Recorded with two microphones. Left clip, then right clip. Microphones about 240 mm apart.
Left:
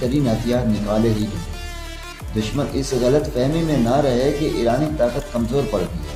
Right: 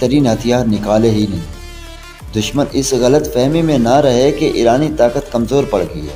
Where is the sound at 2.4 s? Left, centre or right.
Right.